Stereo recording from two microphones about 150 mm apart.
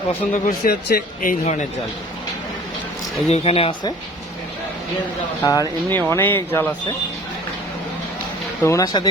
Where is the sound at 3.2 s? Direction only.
45° left (ahead or behind).